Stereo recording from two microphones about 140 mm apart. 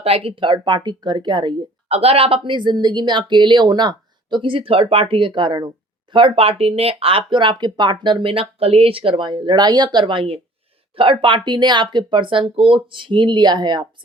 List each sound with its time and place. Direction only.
0.0 s speech: 45° right (ahead or behind)
1.9 s speech: 45° right (ahead or behind)